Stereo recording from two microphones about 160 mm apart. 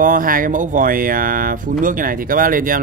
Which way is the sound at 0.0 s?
60° right (ahead or behind).